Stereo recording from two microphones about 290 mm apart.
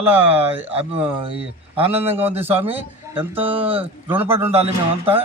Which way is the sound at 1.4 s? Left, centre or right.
Centre.